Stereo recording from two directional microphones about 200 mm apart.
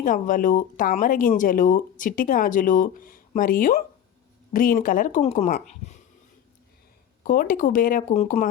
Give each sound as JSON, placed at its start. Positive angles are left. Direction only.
{"t": 0.0, "sound": "speech", "side_deg": 40}
{"t": 7.3, "sound": "speech", "side_deg": 45}